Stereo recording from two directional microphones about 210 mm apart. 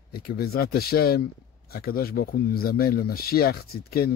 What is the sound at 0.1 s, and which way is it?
Speech, 45° left (ahead or behind).